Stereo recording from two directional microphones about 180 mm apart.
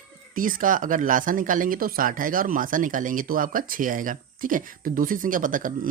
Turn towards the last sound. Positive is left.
turn(degrees=-50)  # may be behind; listen again after turning